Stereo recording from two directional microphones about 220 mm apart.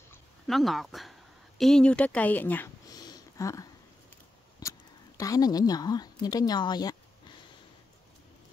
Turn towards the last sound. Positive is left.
turn(degrees=20)  # may be behind; listen again after turning